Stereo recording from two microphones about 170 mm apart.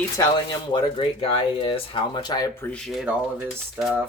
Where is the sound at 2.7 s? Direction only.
Centre (ahead or behind).